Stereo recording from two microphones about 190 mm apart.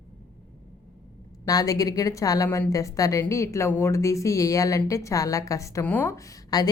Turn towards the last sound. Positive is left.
turn(degrees=20)  # may be behind; listen again after turning